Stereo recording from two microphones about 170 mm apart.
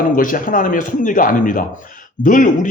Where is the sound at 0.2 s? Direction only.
50° left (ahead or behind).